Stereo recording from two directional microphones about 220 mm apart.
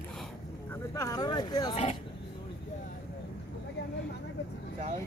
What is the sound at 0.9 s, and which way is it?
Speech, 15° left (ahead or behind).